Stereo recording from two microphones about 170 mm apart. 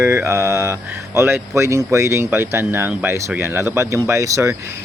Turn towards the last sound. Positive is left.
turn(degrees=-15)  # may be behind; listen again after turning